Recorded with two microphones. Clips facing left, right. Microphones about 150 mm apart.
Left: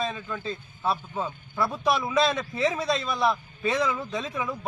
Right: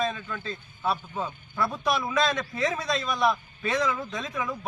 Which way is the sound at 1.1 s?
5° left (ahead or behind).